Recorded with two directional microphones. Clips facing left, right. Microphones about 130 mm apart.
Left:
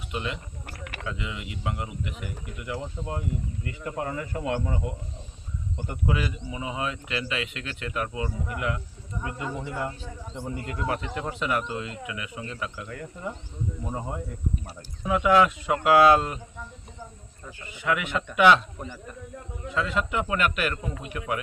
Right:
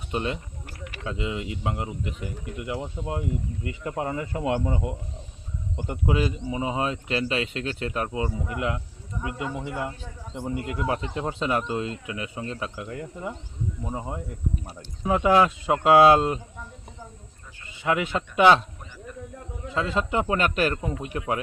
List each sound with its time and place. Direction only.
0.1 s speech: 35° right (ahead or behind)
2.7 s speech: 15° right (ahead or behind)
9.2 s speech: 10° right (ahead or behind)
10.8 s speech: 20° right (ahead or behind)
15.0 s speech: 30° right (ahead or behind)
17.7 s speech: 30° right (ahead or behind)
19.7 s speech: 30° right (ahead or behind)